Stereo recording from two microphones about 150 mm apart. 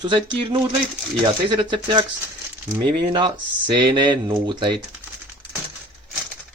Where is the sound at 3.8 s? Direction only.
30° right (ahead or behind).